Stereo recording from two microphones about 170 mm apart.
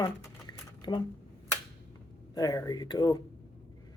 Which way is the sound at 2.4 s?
25° left (ahead or behind).